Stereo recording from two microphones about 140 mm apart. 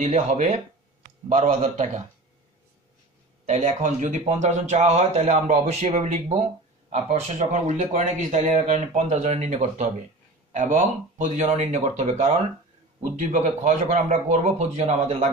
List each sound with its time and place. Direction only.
0.0 s speech: 60° right (ahead or behind)
3.4 s speech: 60° right (ahead or behind)